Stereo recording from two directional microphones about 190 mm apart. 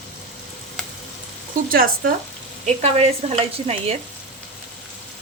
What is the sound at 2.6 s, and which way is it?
Speech, 35° right (ahead or behind).